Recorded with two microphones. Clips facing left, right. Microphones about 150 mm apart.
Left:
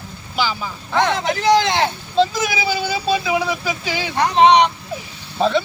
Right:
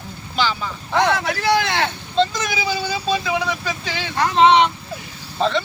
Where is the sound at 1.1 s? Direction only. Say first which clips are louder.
Left 3 dB; 20° left (ahead or behind).